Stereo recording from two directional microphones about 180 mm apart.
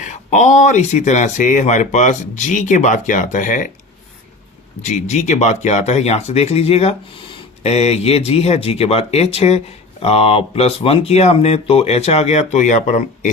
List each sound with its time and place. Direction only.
0.0 s speech: 40° left (ahead or behind)
4.8 s speech: 40° left (ahead or behind)